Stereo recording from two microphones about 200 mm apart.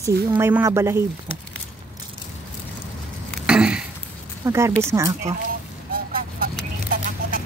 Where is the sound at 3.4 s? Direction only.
5° right (ahead or behind).